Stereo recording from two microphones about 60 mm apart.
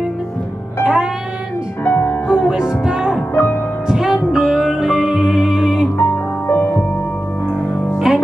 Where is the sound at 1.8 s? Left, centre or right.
Left.